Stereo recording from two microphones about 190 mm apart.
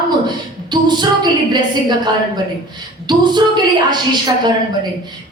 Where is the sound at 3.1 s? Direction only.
25° right (ahead or behind).